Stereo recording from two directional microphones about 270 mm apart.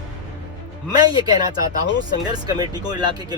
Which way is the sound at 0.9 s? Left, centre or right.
Centre.